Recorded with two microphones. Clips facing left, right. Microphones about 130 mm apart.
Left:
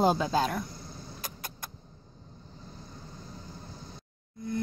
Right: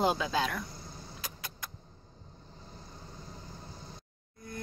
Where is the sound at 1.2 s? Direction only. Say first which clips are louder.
Left 1 dB; 50° left (ahead or behind).